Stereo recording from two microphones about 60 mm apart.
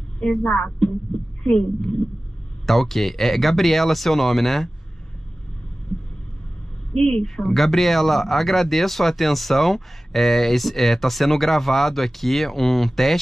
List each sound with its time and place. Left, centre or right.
0.4 s a woman's voice: left
2.6 s speech: centre
6.9 s speech: centre